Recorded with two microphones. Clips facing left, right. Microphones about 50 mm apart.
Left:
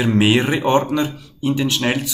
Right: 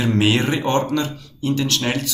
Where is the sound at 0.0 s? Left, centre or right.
Centre.